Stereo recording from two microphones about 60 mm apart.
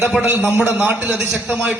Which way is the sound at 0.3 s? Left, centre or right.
Right.